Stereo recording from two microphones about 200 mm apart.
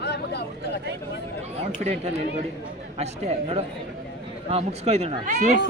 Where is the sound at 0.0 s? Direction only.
55° left (ahead or behind).